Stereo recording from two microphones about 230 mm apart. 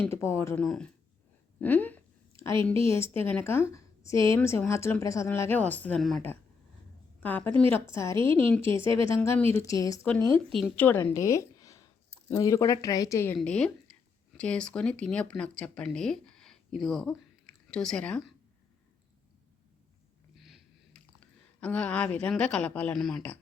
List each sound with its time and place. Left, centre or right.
0.0 s a woman's voice: centre
8.0 s speech: right
8.4 s a woman's voice: centre
10.5 s a woman's voice: centre
20.3 s a sound: centre